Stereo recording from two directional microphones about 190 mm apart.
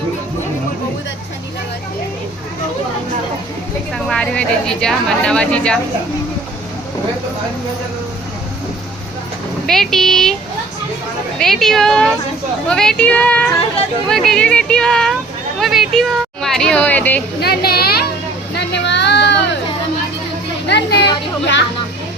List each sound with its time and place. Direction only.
3.9 s a woman's voice: 5° left (ahead or behind)
9.6 s a woman's voice: centre (ahead or behind)
11.3 s a woman's voice: centre (ahead or behind)
17.4 s a woman's voice: 55° left (ahead or behind)
18.5 s a sound: 65° left (ahead or behind)
20.7 s a sound: 60° left (ahead or behind)